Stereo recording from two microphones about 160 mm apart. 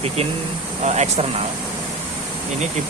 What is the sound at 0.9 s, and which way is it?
Speech, 45° right (ahead or behind).